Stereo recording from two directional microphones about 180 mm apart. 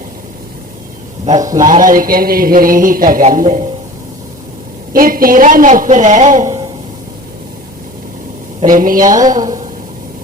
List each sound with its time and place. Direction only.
1.5 s a man's voice: 50° right (ahead or behind)
4.9 s a man's voice: 50° right (ahead or behind)
8.6 s a man's voice: 50° right (ahead or behind)
9.0 s a woman's voice: 20° right (ahead or behind)